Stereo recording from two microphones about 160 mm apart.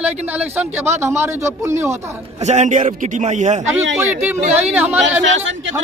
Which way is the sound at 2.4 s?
50° right (ahead or behind).